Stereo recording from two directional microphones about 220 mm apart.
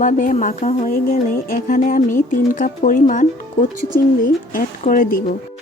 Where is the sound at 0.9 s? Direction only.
40° left (ahead or behind).